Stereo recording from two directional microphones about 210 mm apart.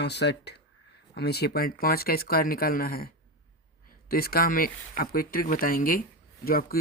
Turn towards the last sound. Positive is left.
turn(degrees=45)  # may be behind; listen again after turning